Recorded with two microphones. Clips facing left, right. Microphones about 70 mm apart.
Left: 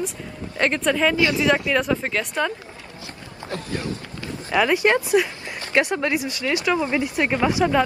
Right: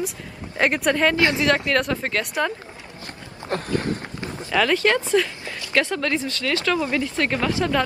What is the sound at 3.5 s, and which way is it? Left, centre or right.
Speech, right.